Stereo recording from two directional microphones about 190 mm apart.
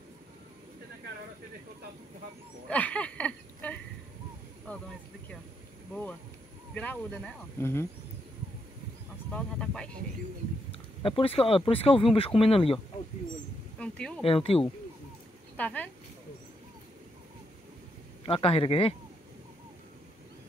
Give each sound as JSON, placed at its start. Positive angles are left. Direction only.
{"t": 2.7, "sound": "speech", "side_deg": 5}
{"t": 6.7, "sound": "speech", "side_deg": 10}
{"t": 9.3, "sound": "speech", "side_deg": 5}
{"t": 10.7, "sound": "speech", "side_deg": 30}
{"t": 13.7, "sound": "speech", "side_deg": 5}
{"t": 14.2, "sound": "speech", "side_deg": 30}
{"t": 15.5, "sound": "speech", "side_deg": 10}
{"t": 18.2, "sound": "speech", "side_deg": 30}